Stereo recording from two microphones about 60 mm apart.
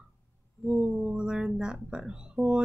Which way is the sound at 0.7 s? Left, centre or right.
Centre.